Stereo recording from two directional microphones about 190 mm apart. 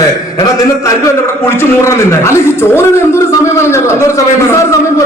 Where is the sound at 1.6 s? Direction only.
15° left (ahead or behind).